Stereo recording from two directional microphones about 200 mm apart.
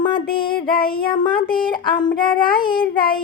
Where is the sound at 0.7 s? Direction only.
50° left (ahead or behind).